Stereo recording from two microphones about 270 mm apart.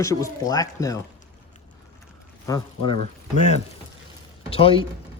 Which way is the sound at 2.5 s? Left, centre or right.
Centre.